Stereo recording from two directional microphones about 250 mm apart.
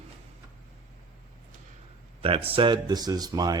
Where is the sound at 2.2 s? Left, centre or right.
Right.